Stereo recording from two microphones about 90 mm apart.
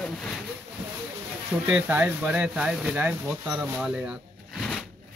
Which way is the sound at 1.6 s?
20° right (ahead or behind).